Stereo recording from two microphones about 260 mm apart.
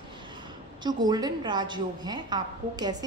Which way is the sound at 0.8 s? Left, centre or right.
Centre.